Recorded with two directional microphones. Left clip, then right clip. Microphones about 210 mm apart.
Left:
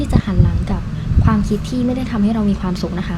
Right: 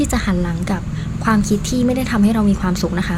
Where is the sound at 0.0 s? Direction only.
25° right (ahead or behind).